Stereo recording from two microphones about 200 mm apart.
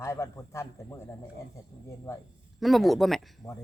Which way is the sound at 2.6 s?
Centre (ahead or behind).